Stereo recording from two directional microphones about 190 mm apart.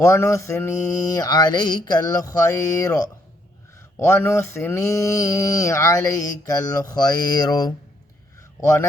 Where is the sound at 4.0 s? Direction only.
10° left (ahead or behind).